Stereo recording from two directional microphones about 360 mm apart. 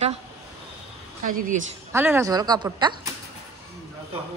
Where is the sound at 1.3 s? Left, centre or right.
Right.